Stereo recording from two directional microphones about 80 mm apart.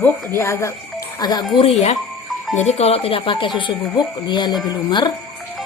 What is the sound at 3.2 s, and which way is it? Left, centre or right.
Speech, left.